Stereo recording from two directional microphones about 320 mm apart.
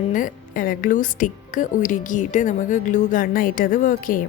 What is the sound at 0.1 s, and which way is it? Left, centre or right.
A woman's voice, left.